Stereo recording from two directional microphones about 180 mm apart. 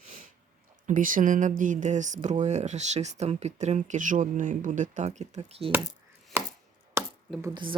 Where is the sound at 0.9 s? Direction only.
50° right (ahead or behind).